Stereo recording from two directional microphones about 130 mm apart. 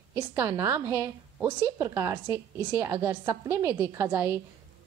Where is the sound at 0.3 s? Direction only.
20° right (ahead or behind).